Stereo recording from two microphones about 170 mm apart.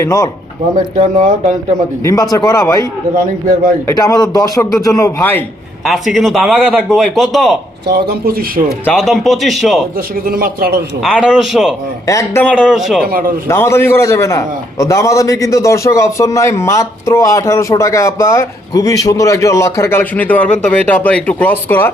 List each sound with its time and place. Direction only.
0.0 s a man's voice: 20° left (ahead or behind)
0.9 s speech: 45° right (ahead or behind)
2.3 s a man's voice: 20° left (ahead or behind)
3.8 s a man's voice: 20° left (ahead or behind)
5.8 s a man's voice: centre (ahead or behind)
7.9 s speech: 70° right (ahead or behind)
8.8 s a man's voice: 5° left (ahead or behind)
10.2 s speech: 60° right (ahead or behind)
11.2 s a man's voice: 5° right (ahead or behind)
12.0 s a man's voice: 15° left (ahead or behind)
12.6 s a man's voice: centre (ahead or behind)
13.0 s speech: 60° right (ahead or behind)
13.5 s a man's voice: 15° left (ahead or behind)